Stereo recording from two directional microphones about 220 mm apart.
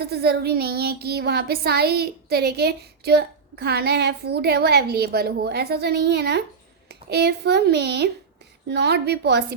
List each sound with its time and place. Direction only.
0.0 s speech: 45° right (ahead or behind)